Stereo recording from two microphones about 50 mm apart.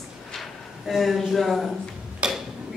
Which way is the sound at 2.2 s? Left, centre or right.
Centre.